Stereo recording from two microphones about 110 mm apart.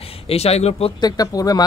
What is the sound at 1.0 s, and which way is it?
Speech, 35° left (ahead or behind).